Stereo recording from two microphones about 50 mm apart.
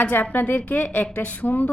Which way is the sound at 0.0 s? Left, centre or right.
Left.